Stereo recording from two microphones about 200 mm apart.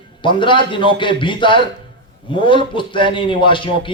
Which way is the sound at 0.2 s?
25° left (ahead or behind).